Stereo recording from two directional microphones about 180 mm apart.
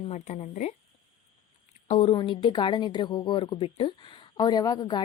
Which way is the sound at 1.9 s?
40° left (ahead or behind).